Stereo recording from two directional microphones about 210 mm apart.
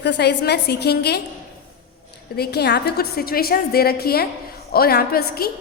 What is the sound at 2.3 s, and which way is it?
A woman's voice, 50° left (ahead or behind).